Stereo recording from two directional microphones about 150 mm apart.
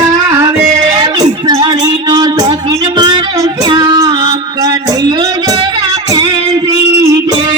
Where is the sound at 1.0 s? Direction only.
25° right (ahead or behind).